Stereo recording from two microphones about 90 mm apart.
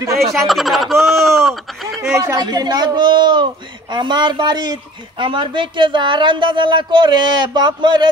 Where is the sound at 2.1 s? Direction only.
45° right (ahead or behind).